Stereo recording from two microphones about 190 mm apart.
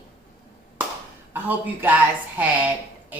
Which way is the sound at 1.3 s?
10° right (ahead or behind).